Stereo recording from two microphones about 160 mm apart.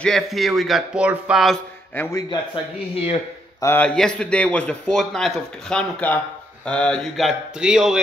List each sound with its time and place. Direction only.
0.0 s a man's voice: centre (ahead or behind)
2.0 s a man's voice: 20° left (ahead or behind)
3.6 s a man's voice: 10° left (ahead or behind)